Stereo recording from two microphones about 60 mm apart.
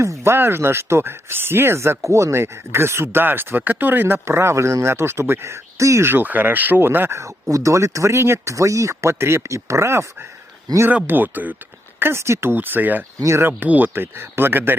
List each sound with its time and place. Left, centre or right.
0.0 s a sound: right
0.3 s speech: right
6.1 s speech: right
7.5 s speech: right
8.5 s speech: right
10.8 s speech: right
11.9 s speech: right
13.1 s speech: right
13.4 s speech: right